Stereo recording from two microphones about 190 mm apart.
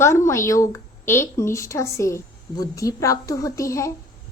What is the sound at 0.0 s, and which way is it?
A woman's voice, 15° left (ahead or behind).